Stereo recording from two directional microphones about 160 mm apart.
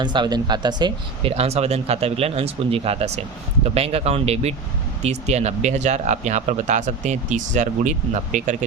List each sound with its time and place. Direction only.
0.0 s speech: 30° right (ahead or behind)
1.3 s speech: 40° right (ahead or behind)